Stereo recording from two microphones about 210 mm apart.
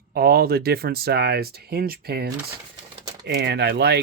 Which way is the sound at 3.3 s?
55° right (ahead or behind).